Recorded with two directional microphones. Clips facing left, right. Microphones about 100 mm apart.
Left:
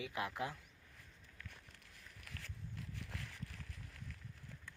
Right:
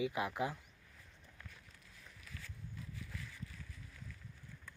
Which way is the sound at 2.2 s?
65° left (ahead or behind).